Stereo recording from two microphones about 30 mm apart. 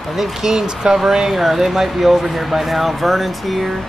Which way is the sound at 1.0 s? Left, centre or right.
Centre.